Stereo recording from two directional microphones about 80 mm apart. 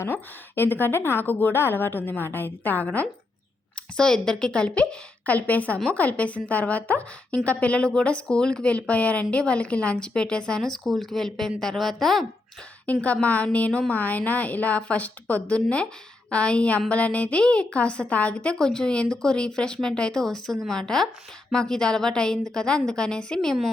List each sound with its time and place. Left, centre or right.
0.0 s a woman's voice: left; by 12.2 s centre
12.8 s a woman's voice: centre